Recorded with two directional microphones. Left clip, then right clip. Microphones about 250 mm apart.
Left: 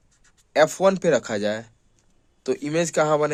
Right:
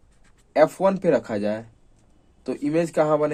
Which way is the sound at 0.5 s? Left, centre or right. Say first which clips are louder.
Even; left.